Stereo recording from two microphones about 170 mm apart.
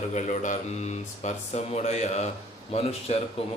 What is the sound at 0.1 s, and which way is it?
Speech, 45° left (ahead or behind).